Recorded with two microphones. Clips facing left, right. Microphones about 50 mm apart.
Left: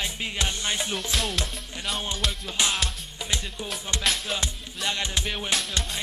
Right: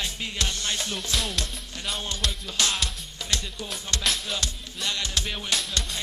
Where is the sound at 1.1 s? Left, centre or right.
Centre.